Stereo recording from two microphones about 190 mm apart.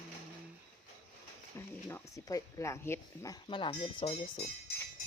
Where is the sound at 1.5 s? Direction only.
15° left (ahead or behind).